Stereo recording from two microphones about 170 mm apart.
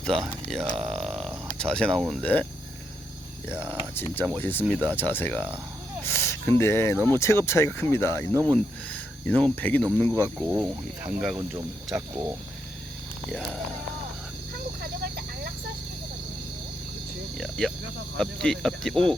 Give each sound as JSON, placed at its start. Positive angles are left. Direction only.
{"t": 0.0, "sound": "speech", "side_deg": 5}
{"t": 3.9, "sound": "speech", "side_deg": 15}
{"t": 8.3, "sound": "speech", "side_deg": -20}
{"t": 8.5, "sound": "speech", "side_deg": 10}
{"t": 10.2, "sound": "speech", "side_deg": -20}
{"t": 11.1, "sound": "speech", "side_deg": 0}
{"t": 11.9, "sound": "speech", "side_deg": -20}
{"t": 14.8, "sound": "snake", "side_deg": -65}
{"t": 17.3, "sound": "speech", "side_deg": 5}